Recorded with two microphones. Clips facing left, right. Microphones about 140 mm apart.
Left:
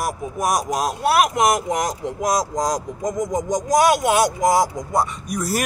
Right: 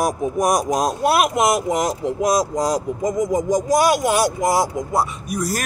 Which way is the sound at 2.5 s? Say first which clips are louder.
Right 2 dB; 10° right (ahead or behind).